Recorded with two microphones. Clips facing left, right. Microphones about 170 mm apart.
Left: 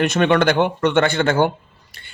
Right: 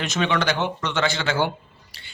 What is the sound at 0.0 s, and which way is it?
Speech, 55° left (ahead or behind).